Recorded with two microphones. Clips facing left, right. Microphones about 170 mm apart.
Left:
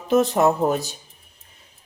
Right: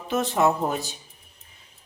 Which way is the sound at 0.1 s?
40° left (ahead or behind).